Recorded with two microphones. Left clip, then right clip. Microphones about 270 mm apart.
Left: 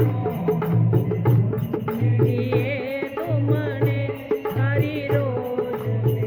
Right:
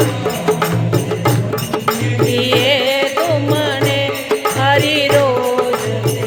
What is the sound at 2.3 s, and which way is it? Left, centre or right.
Music, centre.